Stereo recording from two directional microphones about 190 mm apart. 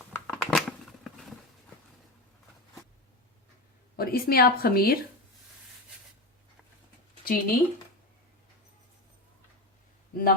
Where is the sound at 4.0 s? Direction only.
50° left (ahead or behind).